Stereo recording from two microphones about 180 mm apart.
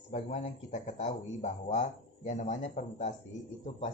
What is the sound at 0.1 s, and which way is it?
Speech, 40° left (ahead or behind).